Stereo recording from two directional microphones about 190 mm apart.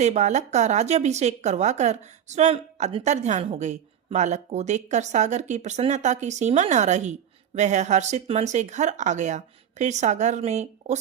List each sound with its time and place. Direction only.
0.0 s speech: 35° right (ahead or behind)